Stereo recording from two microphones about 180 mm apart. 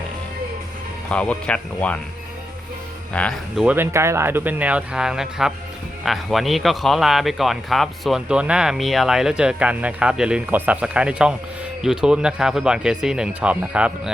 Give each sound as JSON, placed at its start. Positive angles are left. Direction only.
{"t": 1.1, "sound": "speech", "side_deg": 5}
{"t": 3.1, "sound": "speech", "side_deg": 5}